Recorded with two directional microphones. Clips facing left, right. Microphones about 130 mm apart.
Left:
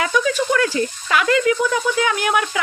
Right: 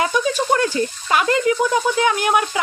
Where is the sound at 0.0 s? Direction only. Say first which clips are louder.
Even; 30° right (ahead or behind).